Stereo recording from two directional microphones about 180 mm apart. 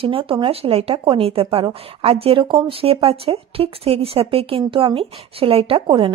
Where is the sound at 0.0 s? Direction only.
30° right (ahead or behind).